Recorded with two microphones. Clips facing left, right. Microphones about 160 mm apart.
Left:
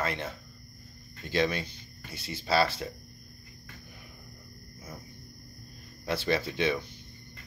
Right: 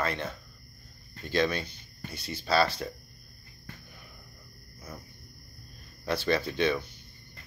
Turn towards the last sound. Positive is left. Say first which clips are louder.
# right 1 dB
turn(degrees=25)  # may be behind; listen again after turning